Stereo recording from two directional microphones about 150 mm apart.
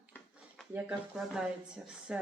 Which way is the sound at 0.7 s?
5° right (ahead or behind).